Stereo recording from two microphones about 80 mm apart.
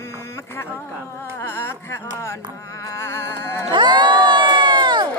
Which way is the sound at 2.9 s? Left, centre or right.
Left.